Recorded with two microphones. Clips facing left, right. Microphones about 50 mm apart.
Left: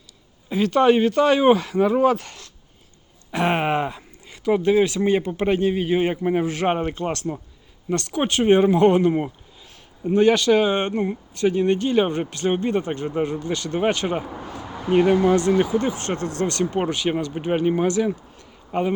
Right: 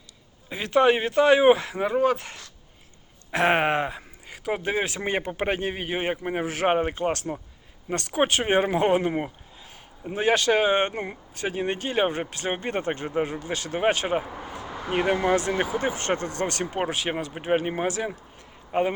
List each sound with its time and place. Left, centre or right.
0.5 s speech: centre
1.9 s speech: centre
2.1 s speech: right
4.9 s speech: right
5.9 s speech: centre
8.1 s speech: right
8.9 s a man's voice: centre
10.3 s speech: right
12.6 s speech: right
13.2 s speech: centre
15.1 s speech: right
16.7 s speech: centre